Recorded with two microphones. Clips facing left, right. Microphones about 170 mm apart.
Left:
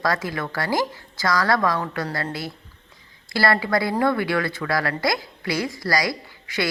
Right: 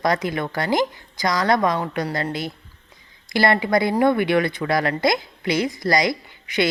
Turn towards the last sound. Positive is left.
turn(degrees=-20)  # may be behind; listen again after turning